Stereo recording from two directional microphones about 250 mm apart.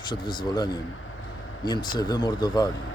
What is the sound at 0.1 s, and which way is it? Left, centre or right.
Speech, centre.